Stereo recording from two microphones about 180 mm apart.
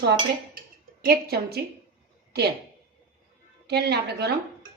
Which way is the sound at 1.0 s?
60° right (ahead or behind).